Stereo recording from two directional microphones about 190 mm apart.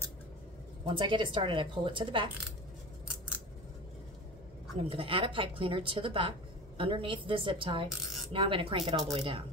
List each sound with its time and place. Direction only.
0.8 s speech: 25° right (ahead or behind)
4.8 s speech: 30° right (ahead or behind)